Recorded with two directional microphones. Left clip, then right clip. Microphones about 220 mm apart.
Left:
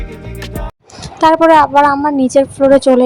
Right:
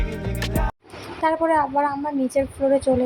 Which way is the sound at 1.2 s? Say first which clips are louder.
Left 12 dB; 40° left (ahead or behind).